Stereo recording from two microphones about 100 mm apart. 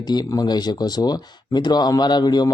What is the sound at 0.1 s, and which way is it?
Speech, 40° left (ahead or behind).